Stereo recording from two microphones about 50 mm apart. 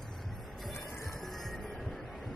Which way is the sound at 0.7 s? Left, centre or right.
Left.